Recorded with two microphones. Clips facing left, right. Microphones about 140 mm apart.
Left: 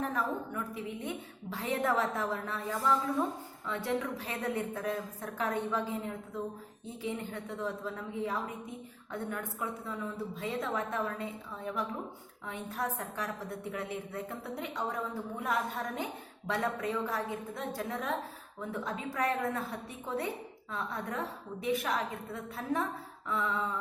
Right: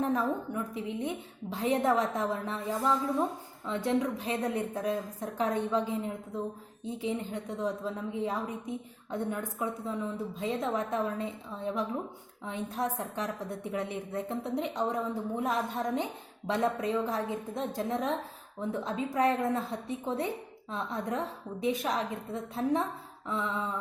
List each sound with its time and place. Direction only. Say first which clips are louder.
0.0 s a woman's voice: right 4 dB; 20° right (ahead or behind)